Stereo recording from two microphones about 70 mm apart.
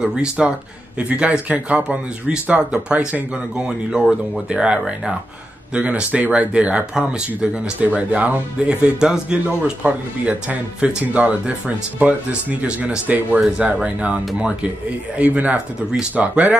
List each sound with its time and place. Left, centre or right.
0.0 s speech: centre